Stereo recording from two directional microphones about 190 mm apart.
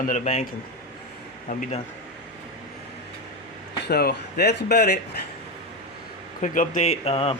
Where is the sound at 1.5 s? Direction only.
40° left (ahead or behind).